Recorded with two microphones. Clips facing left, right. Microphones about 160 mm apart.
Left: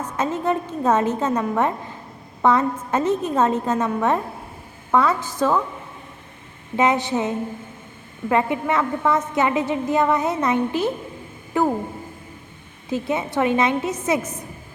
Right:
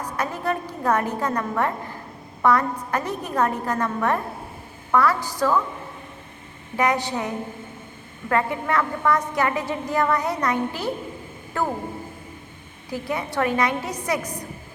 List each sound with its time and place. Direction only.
0.2 s a woman's voice: 20° left (ahead or behind)
6.7 s a woman's voice: 20° left (ahead or behind)
12.9 s a woman's voice: 20° left (ahead or behind)